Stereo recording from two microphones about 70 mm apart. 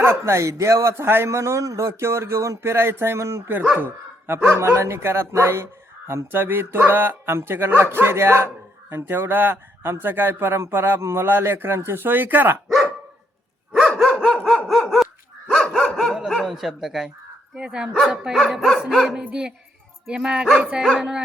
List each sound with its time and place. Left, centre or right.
0.0 s a man's voice: right
3.4 s speech: right
4.5 s a man's voice: right
12.6 s dog: centre
14.0 s dog: centre
14.7 s dog: centre
17.5 s speech: centre